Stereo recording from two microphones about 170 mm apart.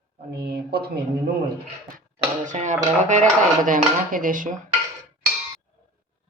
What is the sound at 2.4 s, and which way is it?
Dishes, 45° right (ahead or behind).